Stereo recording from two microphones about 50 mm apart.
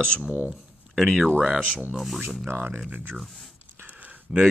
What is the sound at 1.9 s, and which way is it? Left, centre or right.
Speech, centre.